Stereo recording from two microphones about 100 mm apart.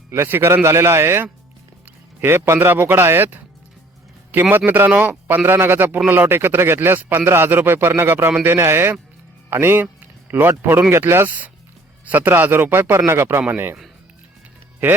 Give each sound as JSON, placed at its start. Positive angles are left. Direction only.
{"t": 0.1, "sound": "a man's voice", "side_deg": -20}